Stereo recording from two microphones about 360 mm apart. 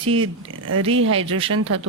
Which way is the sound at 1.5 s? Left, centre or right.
Right.